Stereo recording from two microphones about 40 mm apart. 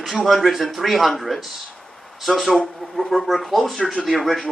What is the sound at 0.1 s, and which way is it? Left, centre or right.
Speech, centre.